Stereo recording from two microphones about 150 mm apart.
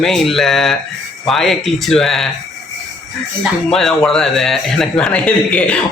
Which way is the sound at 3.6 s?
5° left (ahead or behind).